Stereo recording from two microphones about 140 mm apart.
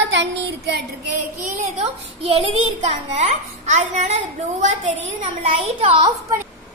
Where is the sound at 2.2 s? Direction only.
45° right (ahead or behind).